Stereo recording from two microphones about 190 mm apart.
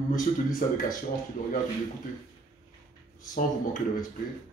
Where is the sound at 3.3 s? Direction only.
45° left (ahead or behind).